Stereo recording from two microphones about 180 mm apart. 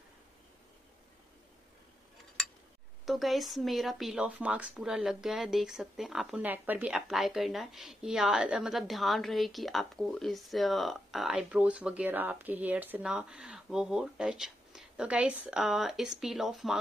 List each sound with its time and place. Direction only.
3.1 s speech: centre (ahead or behind)